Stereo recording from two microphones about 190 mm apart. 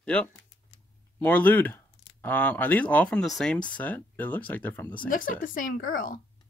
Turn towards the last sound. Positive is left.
turn(degrees=45)  # may be behind; listen again after turning